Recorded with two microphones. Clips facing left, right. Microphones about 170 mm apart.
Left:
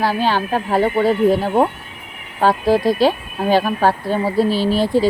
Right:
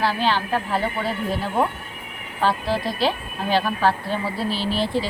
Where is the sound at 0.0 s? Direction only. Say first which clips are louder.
Left 4 dB; 45° left (ahead or behind).